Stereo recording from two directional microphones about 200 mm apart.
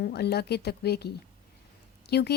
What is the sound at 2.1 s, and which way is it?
Speech, 55° left (ahead or behind).